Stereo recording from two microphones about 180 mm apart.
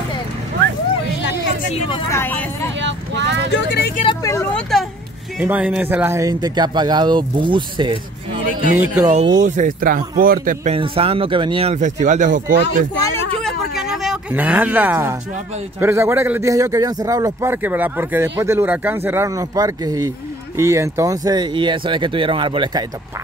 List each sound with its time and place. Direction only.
1.9 s vehicle: 15° left (ahead or behind)
2.8 s vehicle: 80° right
4.0 s vehicle: 20° left (ahead or behind)
5.4 s speech: 10° right (ahead or behind); by 8.0 s 25° right (ahead or behind)
8.7 s a man's voice: 10° right (ahead or behind)
9.1 s a man's voice: 40° right (ahead or behind)
10.7 s speech: 30° right (ahead or behind)
13.4 s a sound: centre (ahead or behind)
15.8 s a man's voice: 15° right (ahead or behind)